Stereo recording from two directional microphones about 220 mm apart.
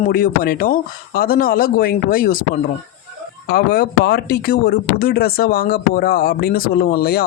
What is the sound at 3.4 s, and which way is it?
Speech, 45° left (ahead or behind).